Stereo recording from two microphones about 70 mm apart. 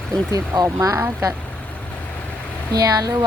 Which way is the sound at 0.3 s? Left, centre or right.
Right.